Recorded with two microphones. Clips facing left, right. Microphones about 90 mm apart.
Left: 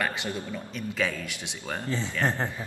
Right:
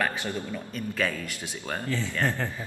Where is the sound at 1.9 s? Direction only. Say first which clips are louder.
Left 1 dB; 20° left (ahead or behind).